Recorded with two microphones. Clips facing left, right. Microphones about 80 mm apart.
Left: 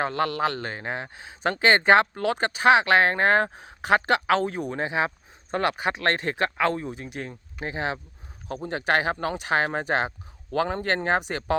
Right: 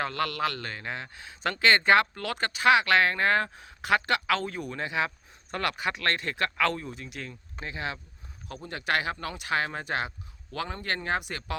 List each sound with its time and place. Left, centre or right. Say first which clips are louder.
0.0 s speech: left 4 dB; left